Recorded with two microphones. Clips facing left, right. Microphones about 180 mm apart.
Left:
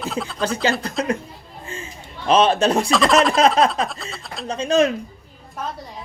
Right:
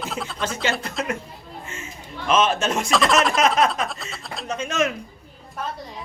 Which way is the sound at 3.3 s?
30° left (ahead or behind).